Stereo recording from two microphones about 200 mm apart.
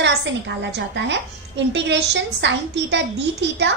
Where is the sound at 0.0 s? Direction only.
60° right (ahead or behind).